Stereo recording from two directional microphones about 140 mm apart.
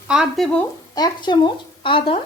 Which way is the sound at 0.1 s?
Centre (ahead or behind).